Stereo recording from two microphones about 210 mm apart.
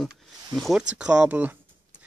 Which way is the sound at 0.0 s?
Centre (ahead or behind).